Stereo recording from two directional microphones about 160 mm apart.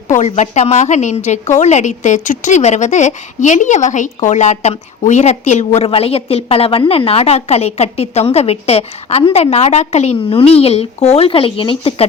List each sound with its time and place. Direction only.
0.1 s a woman's voice: 45° left (ahead or behind)